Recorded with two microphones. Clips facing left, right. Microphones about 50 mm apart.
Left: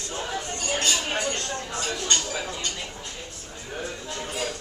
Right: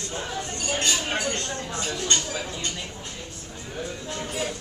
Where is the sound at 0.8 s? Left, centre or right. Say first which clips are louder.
Even; right.